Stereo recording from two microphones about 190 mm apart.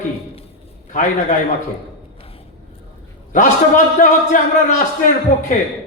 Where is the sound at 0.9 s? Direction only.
45° left (ahead or behind).